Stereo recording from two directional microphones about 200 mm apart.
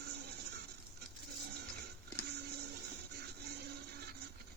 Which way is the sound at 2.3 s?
55° right (ahead or behind).